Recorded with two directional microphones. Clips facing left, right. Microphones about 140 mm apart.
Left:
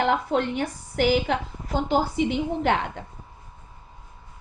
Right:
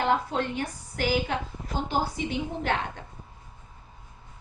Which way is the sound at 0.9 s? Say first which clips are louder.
Left 5 dB; 60° left (ahead or behind).